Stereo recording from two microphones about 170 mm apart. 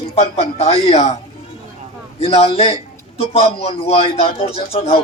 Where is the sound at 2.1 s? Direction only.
35° left (ahead or behind).